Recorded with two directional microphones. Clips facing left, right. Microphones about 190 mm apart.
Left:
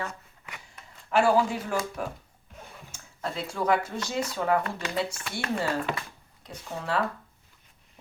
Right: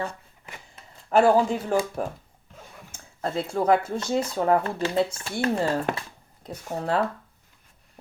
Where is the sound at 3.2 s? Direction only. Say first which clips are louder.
Right 5 dB; 50° right (ahead or behind); by 5.6 s 30° right (ahead or behind).